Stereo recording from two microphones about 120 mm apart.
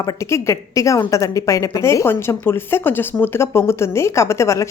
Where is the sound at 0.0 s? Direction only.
25° left (ahead or behind).